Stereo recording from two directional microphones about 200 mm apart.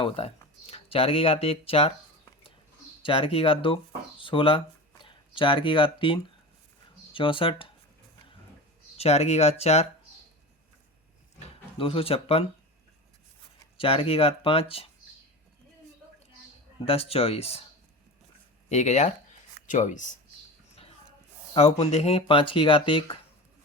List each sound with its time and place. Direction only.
0.0 s speech: 30° left (ahead or behind)
3.0 s speech: 25° left (ahead or behind)
9.0 s speech: 30° left (ahead or behind)
11.3 s speech: 25° left (ahead or behind)
13.7 s speech: 30° left (ahead or behind)
16.8 s speech: 30° left (ahead or behind)
18.7 s speech: 35° left (ahead or behind)
21.5 s speech: 30° left (ahead or behind)